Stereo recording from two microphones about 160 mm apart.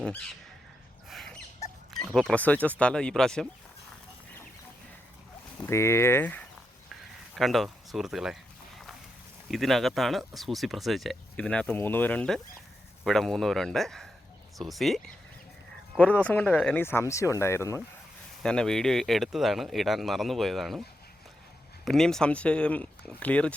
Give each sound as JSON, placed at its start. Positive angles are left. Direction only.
{"t": 0.0, "sound": "a sound", "side_deg": 5}
{"t": 1.1, "sound": "rodents", "side_deg": 5}
{"t": 1.9, "sound": "speech", "side_deg": 0}
{"t": 5.5, "sound": "speech", "side_deg": 15}
{"t": 7.3, "sound": "speech", "side_deg": 0}
{"t": 9.5, "sound": "speech", "side_deg": 0}
{"t": 16.2, "sound": "speech", "side_deg": 10}
{"t": 18.4, "sound": "speech", "side_deg": 5}
{"t": 21.8, "sound": "speech", "side_deg": 5}